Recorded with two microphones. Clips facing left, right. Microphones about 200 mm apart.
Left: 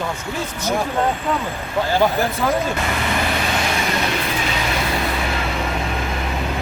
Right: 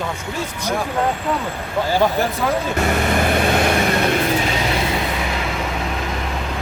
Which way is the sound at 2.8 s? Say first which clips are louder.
Right 4 dB; 45° right (ahead or behind).